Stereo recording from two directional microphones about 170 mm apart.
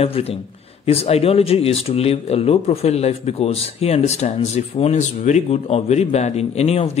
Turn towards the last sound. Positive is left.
turn(degrees=40)  # may be behind; listen again after turning